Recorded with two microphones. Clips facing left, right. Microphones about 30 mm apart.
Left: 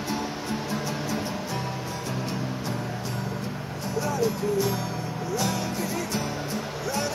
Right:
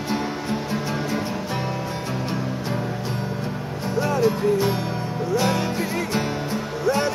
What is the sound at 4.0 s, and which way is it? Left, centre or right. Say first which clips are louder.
Music: right 6 dB; right.